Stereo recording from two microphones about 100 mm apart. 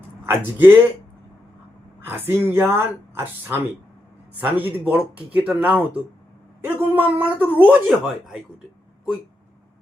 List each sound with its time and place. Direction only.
0.3 s speech: 20° right (ahead or behind)
2.0 s speech: 20° right (ahead or behind); by 8.4 s 5° right (ahead or behind)